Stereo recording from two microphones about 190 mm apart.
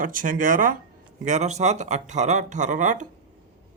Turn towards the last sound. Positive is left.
turn(degrees=-40)  # may be behind; listen again after turning